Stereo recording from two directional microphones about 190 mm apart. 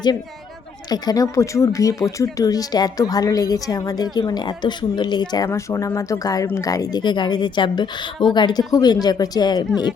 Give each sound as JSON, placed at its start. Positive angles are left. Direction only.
{"t": 0.9, "sound": "speech", "side_deg": 20}